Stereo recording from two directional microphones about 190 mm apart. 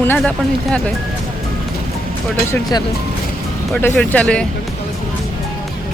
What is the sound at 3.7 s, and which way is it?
Speech, 10° left (ahead or behind).